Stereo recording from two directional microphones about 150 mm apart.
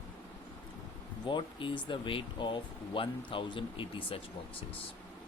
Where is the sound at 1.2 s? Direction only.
30° left (ahead or behind).